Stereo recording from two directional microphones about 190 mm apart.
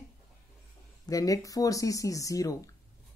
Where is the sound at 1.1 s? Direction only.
20° left (ahead or behind).